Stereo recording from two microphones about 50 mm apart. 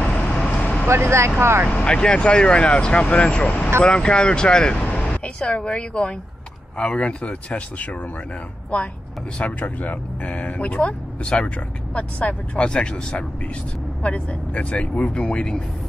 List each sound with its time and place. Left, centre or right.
0.0 s vehicle: left
0.5 s vehicle: left
0.8 s speech: right
1.8 s speech: centre
4.8 s speech: left
9.4 s speech: left